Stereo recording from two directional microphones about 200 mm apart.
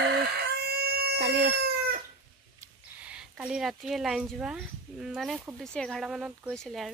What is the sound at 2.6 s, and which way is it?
Speech, 5° right (ahead or behind).